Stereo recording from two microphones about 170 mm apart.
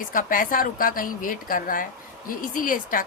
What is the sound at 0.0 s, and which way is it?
Speech, 55° left (ahead or behind).